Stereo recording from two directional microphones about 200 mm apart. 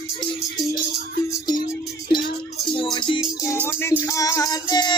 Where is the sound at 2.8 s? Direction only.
25° left (ahead or behind).